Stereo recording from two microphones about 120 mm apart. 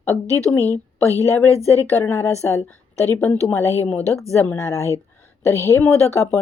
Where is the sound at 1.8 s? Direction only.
20° left (ahead or behind).